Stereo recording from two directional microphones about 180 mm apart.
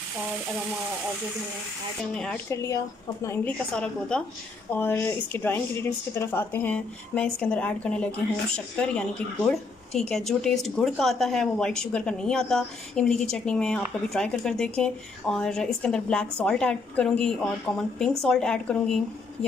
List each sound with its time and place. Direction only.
2.5 s speech: 15° left (ahead or behind)